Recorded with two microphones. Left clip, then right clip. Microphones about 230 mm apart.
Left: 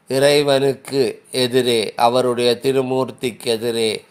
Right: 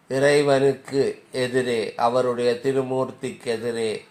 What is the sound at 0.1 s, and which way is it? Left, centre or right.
Speech, left.